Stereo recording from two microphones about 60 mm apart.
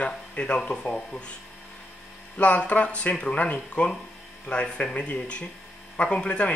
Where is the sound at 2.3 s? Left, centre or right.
Left.